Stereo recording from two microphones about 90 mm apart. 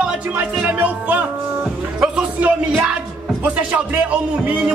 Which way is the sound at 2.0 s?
10° right (ahead or behind).